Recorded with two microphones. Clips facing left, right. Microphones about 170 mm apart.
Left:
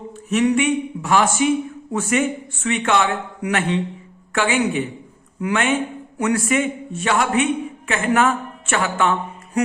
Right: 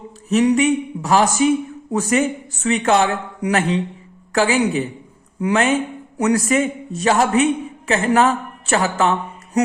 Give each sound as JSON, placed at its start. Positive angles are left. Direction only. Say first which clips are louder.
{"t": 0.3, "sound": "speech", "louder": "right 2 dB", "side_deg": -35}